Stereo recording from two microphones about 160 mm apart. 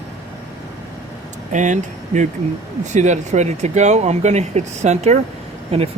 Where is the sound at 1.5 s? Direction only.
50° right (ahead or behind).